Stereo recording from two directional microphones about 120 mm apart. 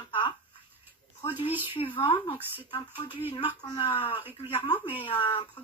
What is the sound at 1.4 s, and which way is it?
Speech, 45° left (ahead or behind).